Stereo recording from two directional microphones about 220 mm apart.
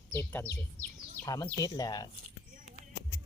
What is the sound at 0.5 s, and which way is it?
Speech, 40° left (ahead or behind).